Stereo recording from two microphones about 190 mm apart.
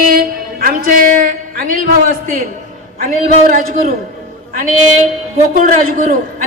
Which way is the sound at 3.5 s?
45° right (ahead or behind).